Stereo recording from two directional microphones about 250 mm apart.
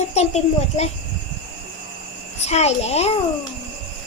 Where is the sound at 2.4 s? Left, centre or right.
Left.